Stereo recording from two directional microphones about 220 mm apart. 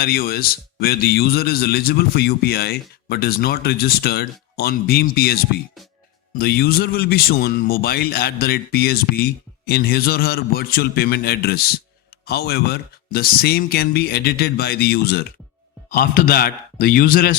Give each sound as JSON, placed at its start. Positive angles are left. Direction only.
{"t": 0.0, "sound": "a man's voice", "side_deg": 45}
{"t": 6.4, "sound": "a man's voice", "side_deg": 45}